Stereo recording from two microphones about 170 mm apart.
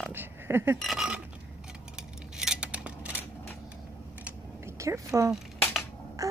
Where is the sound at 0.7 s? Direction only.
Centre (ahead or behind).